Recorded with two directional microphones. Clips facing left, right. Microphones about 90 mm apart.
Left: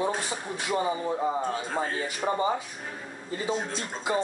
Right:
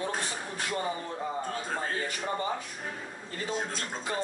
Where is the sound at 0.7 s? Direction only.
15° left (ahead or behind).